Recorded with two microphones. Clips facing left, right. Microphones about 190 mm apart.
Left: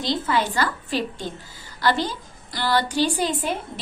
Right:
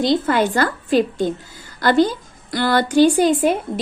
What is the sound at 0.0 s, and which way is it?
A woman's voice, 55° right (ahead or behind).